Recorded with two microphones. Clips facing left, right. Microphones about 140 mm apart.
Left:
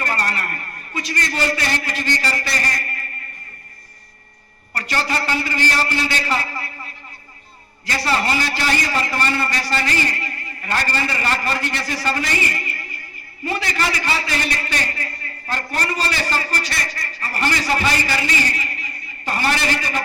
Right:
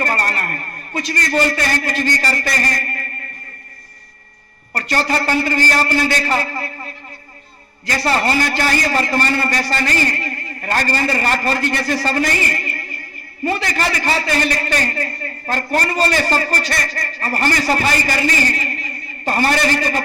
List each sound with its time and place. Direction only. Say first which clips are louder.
0.0 s a man's voice: right 3 dB; 45° right (ahead or behind)
4.7 s a man's voice: right 4 dB; 45° right (ahead or behind)
7.9 s a man's voice: right 3 dB; 45° right (ahead or behind)